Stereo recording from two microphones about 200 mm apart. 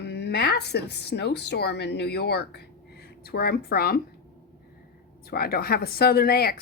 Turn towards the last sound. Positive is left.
turn(degrees=50)  # may be behind; listen again after turning